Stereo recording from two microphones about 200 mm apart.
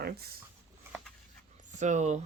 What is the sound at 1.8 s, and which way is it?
Speech, 35° right (ahead or behind).